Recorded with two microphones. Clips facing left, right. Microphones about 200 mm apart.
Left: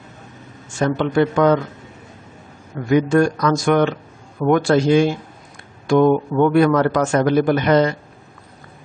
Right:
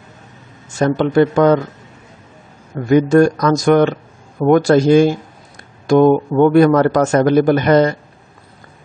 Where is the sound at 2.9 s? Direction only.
40° right (ahead or behind).